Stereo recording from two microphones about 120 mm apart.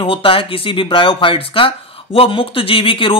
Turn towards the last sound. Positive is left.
turn(degrees=45)  # may be behind; listen again after turning